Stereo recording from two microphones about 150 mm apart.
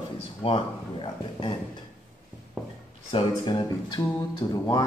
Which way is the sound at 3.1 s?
35° left (ahead or behind).